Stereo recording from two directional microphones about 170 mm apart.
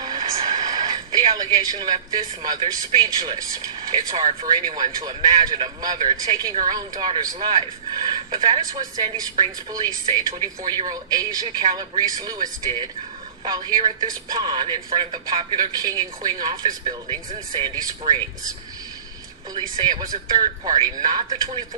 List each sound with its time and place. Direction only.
0.0 s a man's voice: 25° right (ahead or behind)
19.5 s a man's voice: 25° right (ahead or behind)